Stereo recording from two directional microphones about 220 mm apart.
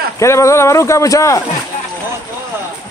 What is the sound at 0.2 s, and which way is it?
A man's voice, 15° left (ahead or behind).